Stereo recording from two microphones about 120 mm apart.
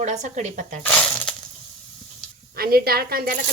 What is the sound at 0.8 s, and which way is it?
Speech, 10° left (ahead or behind).